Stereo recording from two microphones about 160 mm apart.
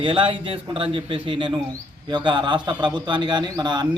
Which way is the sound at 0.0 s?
35° right (ahead or behind).